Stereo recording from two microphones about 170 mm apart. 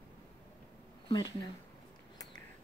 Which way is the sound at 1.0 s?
25° left (ahead or behind).